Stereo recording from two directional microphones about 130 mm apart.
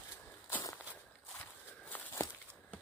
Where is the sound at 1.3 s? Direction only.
10° left (ahead or behind).